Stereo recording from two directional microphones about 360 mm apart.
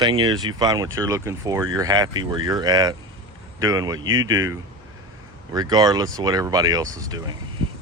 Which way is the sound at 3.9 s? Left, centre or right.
Right.